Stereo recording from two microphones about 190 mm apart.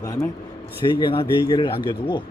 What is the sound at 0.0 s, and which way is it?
A man's voice, 15° left (ahead or behind).